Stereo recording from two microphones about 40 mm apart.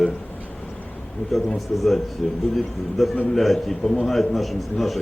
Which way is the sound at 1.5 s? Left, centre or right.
Centre.